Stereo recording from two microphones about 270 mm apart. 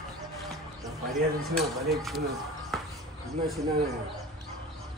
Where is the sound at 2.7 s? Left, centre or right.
Centre.